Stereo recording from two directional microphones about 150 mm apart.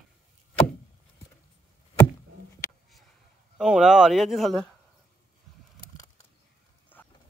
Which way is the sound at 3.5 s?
5° right (ahead or behind).